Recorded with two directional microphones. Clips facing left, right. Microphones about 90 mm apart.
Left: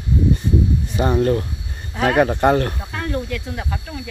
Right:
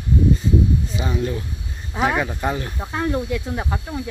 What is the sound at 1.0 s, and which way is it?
Speech, 55° left (ahead or behind).